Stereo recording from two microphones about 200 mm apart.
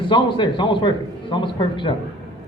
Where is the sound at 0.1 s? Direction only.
25° left (ahead or behind).